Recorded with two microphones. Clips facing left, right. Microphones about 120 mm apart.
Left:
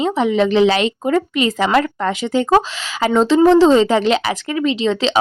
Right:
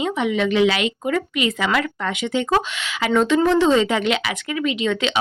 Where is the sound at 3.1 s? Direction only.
25° left (ahead or behind).